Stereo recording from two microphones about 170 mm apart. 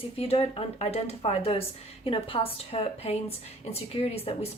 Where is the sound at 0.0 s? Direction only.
35° left (ahead or behind).